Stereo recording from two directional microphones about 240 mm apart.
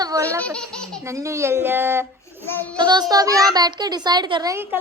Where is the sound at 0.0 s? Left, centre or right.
Centre.